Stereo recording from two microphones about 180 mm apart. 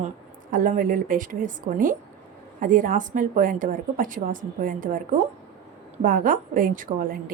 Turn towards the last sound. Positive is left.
turn(degrees=-50)  # may be behind; listen again after turning